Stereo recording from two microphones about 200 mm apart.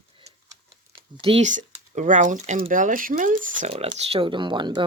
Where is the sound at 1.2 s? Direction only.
35° right (ahead or behind).